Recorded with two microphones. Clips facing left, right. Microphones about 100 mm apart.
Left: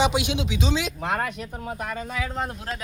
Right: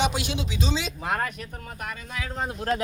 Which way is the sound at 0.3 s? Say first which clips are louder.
Left 3 dB; 70° left (ahead or behind).